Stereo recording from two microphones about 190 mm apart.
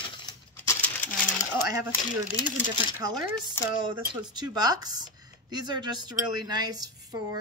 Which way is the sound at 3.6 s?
15° left (ahead or behind).